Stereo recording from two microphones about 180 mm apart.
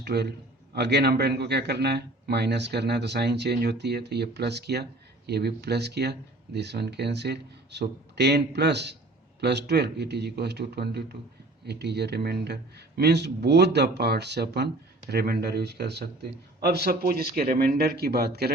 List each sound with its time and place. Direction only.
0.0 s a man's voice: 65° right (ahead or behind)